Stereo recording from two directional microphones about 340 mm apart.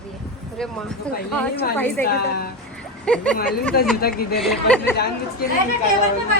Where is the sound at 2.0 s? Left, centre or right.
Left.